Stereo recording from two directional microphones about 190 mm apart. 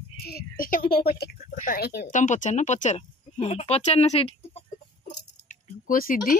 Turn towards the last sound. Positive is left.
turn(degrees=50)  # may be behind; listen again after turning